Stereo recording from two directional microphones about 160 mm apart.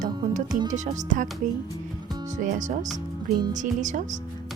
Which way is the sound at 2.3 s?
55° right (ahead or behind).